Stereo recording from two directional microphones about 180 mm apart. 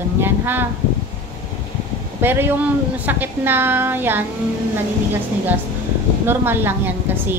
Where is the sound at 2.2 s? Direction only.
10° right (ahead or behind).